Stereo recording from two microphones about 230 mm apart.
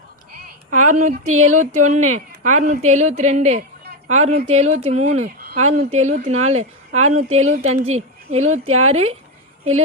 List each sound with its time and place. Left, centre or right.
0.9 s a woman's voice: right
8.6 s a woman's voice: right
8.9 s speech: right